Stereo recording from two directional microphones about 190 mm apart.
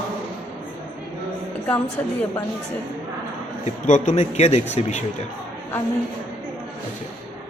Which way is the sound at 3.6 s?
40° left (ahead or behind).